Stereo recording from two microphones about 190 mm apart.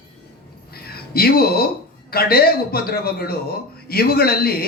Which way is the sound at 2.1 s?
55° left (ahead or behind).